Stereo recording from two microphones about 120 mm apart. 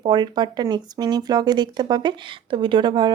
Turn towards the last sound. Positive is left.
turn(degrees=-40)  # may be behind; listen again after turning